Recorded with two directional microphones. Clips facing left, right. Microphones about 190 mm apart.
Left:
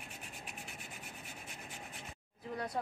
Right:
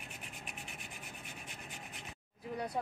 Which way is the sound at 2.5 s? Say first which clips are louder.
Right 1 dB; 15° right (ahead or behind).